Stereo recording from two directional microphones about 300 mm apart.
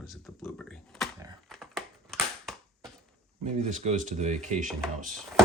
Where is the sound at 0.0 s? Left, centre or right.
Centre.